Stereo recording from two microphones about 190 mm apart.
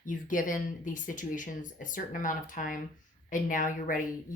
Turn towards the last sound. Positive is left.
turn(degrees=45)  # may be behind; listen again after turning